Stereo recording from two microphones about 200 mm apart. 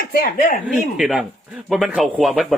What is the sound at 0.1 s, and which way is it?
Speech, 45° left (ahead or behind).